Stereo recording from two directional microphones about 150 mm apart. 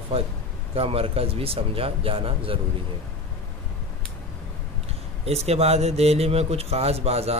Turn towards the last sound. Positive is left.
turn(degrees=-40)  # may be behind; listen again after turning